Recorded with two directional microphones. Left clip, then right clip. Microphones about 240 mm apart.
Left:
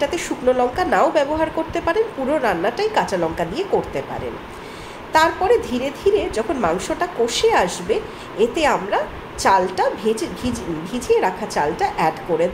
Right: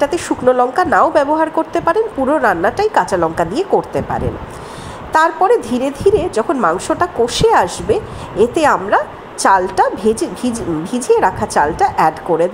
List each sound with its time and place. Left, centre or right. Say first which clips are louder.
0.0 s a woman's voice: right 6 dB; right
5.1 s a woman's voice: right 4 dB; right